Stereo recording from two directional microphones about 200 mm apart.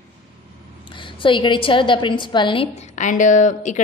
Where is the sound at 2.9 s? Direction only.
40° left (ahead or behind).